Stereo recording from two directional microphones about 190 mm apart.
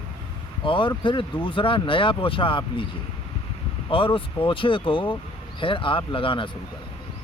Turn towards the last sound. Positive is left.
turn(degrees=25)  # may be behind; listen again after turning